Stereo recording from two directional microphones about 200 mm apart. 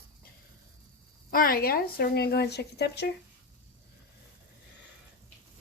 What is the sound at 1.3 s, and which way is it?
Speech, 45° left (ahead or behind).